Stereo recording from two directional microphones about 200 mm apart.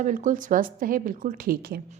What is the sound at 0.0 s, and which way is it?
A woman's voice, 40° right (ahead or behind).